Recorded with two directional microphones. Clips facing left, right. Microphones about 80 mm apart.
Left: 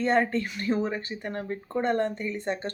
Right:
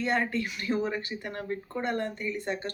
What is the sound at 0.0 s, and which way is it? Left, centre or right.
Speech, left.